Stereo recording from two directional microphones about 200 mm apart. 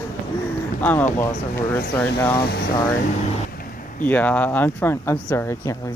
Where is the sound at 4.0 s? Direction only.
10° left (ahead or behind).